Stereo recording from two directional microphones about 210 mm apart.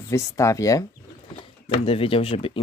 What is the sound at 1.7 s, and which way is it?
Speech, 25° left (ahead or behind).